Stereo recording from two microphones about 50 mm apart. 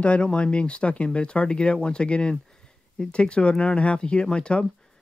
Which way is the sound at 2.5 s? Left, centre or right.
Centre.